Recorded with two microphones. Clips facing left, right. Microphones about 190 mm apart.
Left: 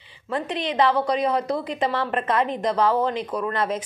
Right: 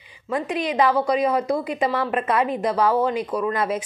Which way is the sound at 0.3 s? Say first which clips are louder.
Right 2 dB; 10° right (ahead or behind).